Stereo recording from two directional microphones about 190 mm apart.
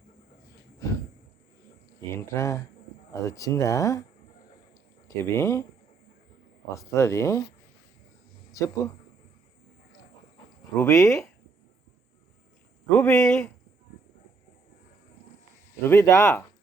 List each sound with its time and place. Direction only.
2.1 s speech: 15° left (ahead or behind)
5.0 s speech: 15° left (ahead or behind)
6.7 s speech: 15° left (ahead or behind)
8.5 s speech: 15° left (ahead or behind)
10.8 s speech: 15° left (ahead or behind)
12.9 s speech: 5° left (ahead or behind)
15.8 s speech: 15° left (ahead or behind)